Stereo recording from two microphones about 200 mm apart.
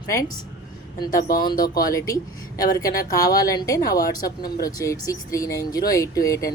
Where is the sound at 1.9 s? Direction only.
15° left (ahead or behind).